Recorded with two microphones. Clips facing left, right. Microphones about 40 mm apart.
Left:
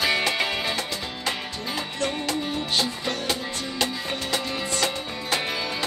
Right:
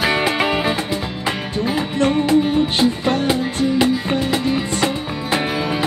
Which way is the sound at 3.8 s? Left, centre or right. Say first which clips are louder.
Right 6 dB; centre.